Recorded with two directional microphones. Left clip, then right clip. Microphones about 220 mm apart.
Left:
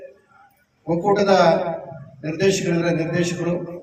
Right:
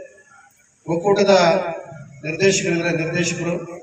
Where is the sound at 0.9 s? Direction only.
50° left (ahead or behind).